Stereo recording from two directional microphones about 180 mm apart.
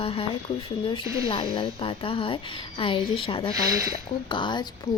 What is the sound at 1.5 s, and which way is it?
Speech, 30° left (ahead or behind).